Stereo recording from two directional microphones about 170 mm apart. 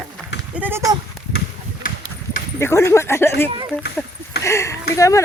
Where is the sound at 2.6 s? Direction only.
15° left (ahead or behind).